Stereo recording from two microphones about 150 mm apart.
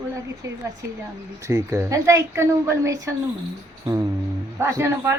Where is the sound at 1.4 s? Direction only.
20° right (ahead or behind).